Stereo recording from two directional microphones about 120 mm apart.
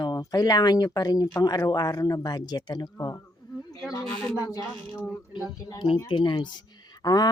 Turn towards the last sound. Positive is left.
turn(degrees=30)  # may be behind; listen again after turning